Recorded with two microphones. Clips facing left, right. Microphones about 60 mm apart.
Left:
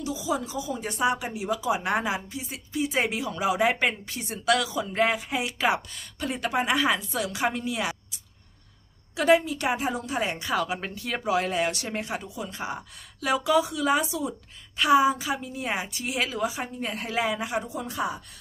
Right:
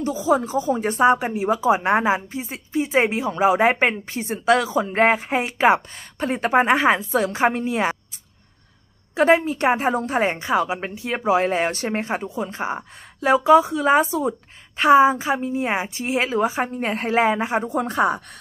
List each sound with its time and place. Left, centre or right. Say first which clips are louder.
0.0 s speech: right 9 dB; right
9.1 s speech: right 4 dB; right
17.6 s speech: right 10 dB; right